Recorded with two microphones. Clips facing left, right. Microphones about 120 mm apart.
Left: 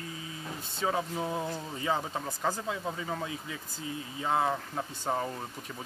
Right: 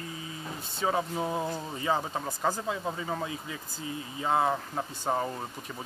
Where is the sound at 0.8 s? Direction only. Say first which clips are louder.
Right 2 dB; 25° right (ahead or behind).